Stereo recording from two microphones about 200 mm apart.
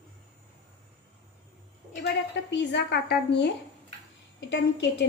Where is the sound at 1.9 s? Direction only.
55° left (ahead or behind).